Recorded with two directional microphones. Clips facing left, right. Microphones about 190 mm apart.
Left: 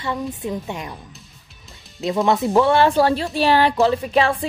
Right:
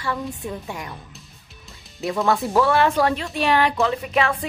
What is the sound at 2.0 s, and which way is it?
Speech, 20° left (ahead or behind).